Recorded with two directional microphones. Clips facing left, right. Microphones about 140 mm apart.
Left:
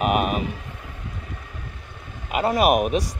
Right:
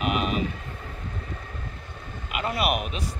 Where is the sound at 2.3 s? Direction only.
40° left (ahead or behind).